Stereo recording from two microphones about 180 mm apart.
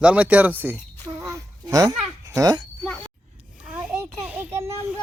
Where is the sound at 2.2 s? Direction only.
20° right (ahead or behind).